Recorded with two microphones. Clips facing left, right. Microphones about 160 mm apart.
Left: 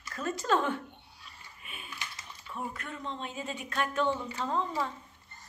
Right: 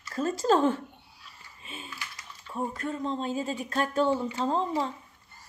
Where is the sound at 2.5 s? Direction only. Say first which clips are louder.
Right 7 dB; 35° right (ahead or behind).